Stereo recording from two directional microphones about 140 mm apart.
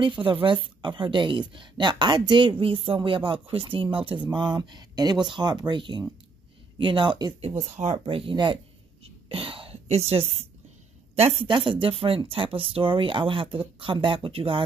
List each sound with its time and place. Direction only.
0.0 s speech: 35° right (ahead or behind)
7.5 s speech: 55° right (ahead or behind)
8.0 s speech: 40° right (ahead or behind)
9.0 s whispering: 40° right (ahead or behind)
11.1 s speech: 45° right (ahead or behind)